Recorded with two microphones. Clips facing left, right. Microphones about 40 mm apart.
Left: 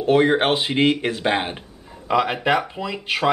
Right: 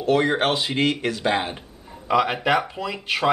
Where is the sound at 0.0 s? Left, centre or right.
Centre.